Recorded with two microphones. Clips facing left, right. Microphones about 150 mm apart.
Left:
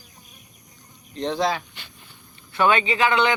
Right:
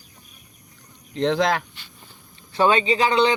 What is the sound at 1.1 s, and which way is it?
Speech, 90° right.